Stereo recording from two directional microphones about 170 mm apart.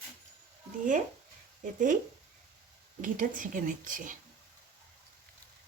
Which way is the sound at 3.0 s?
50° right (ahead or behind).